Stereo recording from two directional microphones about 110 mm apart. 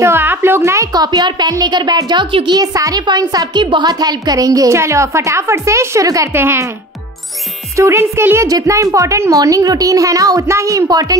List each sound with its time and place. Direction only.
0.0 s a woman's voice: 20° right (ahead or behind)
7.7 s a woman's voice: 25° right (ahead or behind)